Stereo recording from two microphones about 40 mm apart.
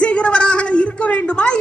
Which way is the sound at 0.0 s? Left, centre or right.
Left.